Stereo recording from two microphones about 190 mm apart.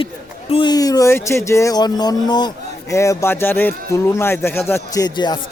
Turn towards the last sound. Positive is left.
turn(degrees=25)  # may be behind; listen again after turning